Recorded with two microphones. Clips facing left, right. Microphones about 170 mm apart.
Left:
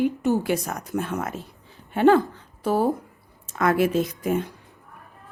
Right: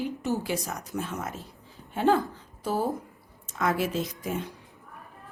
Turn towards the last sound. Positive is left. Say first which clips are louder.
# left 7 dB
turn(degrees=55)  # may be behind; listen again after turning